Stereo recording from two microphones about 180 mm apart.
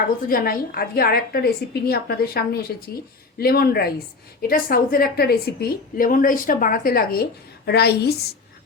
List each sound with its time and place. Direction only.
0.3 s a woman's voice: 55° left (ahead or behind)